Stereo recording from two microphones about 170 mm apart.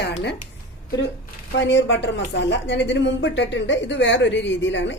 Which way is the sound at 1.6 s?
90° left.